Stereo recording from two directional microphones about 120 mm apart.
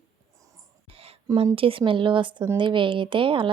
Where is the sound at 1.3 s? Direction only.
50° right (ahead or behind).